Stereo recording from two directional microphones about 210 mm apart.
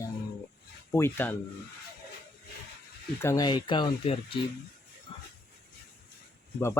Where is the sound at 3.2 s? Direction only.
15° left (ahead or behind).